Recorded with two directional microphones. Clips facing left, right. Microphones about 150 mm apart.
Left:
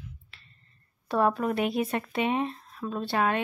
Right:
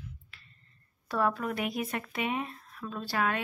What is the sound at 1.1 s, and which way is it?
Speech, 25° left (ahead or behind).